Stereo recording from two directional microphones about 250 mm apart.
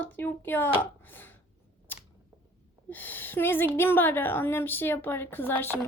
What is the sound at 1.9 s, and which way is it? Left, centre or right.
Camera, centre.